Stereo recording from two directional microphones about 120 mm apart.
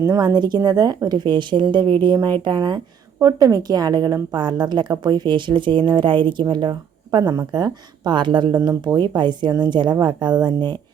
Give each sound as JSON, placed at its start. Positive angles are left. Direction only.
{"t": 0.0, "sound": "speech", "side_deg": -30}
{"t": 8.5, "sound": "speech", "side_deg": -30}